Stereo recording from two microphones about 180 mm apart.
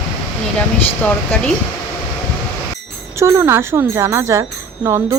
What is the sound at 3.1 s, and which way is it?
Speech, 15° right (ahead or behind).